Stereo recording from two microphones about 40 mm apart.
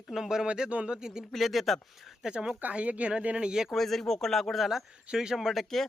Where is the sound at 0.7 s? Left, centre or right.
Right.